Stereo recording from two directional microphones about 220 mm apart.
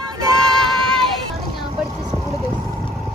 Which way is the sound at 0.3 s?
Centre (ahead or behind).